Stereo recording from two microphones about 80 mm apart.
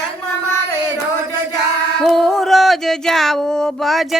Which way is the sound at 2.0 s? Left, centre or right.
Centre.